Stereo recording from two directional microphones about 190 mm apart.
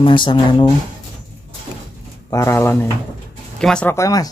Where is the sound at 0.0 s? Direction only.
25° left (ahead or behind).